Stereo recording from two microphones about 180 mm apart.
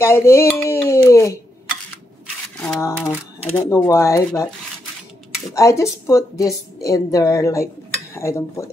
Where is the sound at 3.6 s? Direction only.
15° left (ahead or behind).